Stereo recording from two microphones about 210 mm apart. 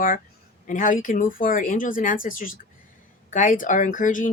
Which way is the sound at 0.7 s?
40° left (ahead or behind).